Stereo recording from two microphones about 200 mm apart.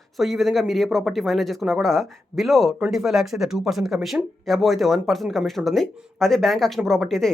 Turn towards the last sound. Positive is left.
turn(degrees=0)  # may be behind; listen again after turning